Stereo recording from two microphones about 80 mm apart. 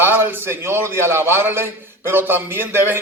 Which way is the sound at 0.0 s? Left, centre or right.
Right.